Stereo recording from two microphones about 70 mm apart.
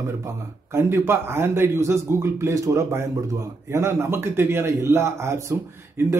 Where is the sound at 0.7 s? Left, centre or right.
Right.